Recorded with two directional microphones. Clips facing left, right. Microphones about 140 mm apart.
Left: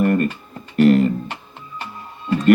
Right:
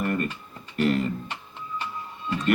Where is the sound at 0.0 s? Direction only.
55° left (ahead or behind).